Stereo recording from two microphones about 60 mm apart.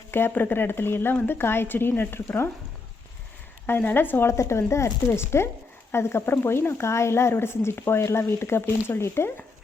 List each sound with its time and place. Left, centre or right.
0.1 s speech: left
3.7 s speech: left
4.3 s speech: left